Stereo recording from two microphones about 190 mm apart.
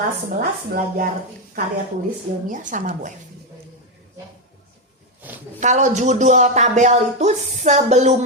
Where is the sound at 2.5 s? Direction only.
45° right (ahead or behind).